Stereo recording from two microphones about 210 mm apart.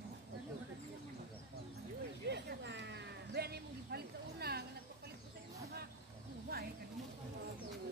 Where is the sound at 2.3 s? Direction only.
55° right (ahead or behind).